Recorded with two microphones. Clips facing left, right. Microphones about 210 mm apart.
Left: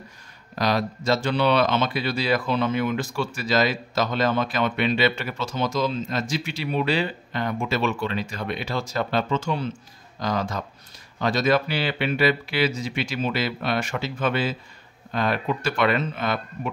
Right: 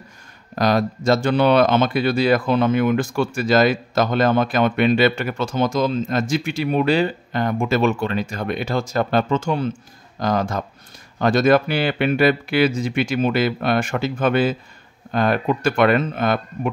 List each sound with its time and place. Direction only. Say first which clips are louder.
0.6 s speech: right 5 dB; 50° right (ahead or behind)